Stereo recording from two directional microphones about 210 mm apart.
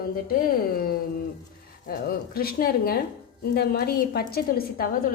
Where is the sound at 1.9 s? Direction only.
45° left (ahead or behind).